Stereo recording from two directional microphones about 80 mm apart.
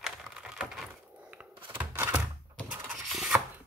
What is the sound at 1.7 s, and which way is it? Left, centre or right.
Typewriter, right.